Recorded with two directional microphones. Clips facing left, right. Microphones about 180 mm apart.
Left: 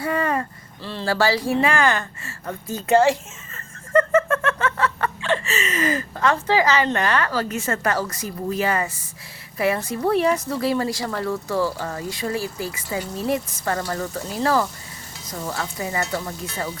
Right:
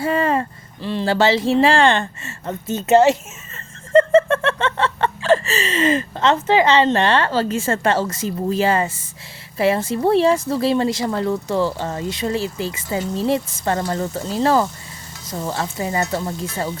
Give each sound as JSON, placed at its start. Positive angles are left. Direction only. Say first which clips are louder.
{"t": 0.0, "sound": "speech", "louder": "right 4 dB", "side_deg": -25}
{"t": 3.9, "sound": "snicker", "louder": "right 5 dB", "side_deg": -30}
{"t": 5.3, "sound": "speech", "louder": "right 8 dB", "side_deg": -35}